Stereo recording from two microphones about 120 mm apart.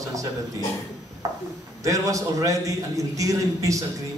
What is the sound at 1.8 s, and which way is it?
A man's voice, 25° right (ahead or behind).